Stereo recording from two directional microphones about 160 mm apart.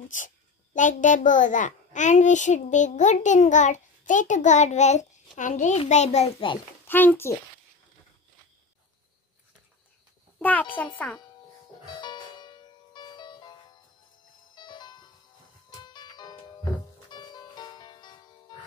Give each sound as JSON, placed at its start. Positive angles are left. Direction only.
{"t": 0.7, "sound": "a child's voice", "side_deg": 50}
{"t": 6.9, "sound": "a child's voice", "side_deg": 10}
{"t": 10.4, "sound": "a child's voice", "side_deg": 10}
{"t": 12.0, "sound": "music", "side_deg": 25}